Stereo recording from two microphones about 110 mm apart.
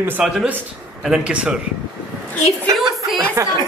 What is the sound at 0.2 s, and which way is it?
A man's voice, 5° right (ahead or behind).